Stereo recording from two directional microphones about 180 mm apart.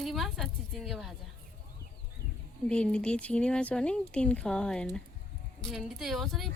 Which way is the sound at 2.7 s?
5° left (ahead or behind).